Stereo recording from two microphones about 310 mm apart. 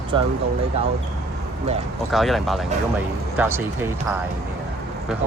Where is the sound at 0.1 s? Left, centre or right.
Centre.